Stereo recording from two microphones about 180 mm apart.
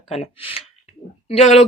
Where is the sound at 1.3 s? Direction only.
35° left (ahead or behind).